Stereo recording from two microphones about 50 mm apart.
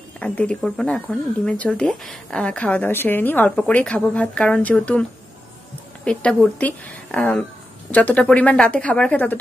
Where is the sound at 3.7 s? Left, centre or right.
Left.